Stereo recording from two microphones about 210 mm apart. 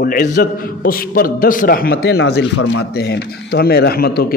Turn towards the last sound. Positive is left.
turn(degrees=45)  # may be behind; listen again after turning